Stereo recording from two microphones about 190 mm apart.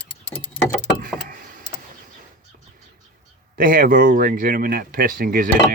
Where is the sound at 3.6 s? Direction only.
45° right (ahead or behind).